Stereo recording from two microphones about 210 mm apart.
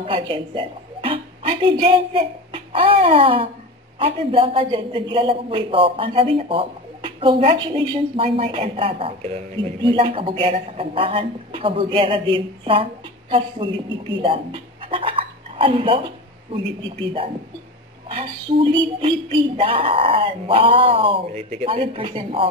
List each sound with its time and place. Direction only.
0.0 s a woman's voice: 25° right (ahead or behind)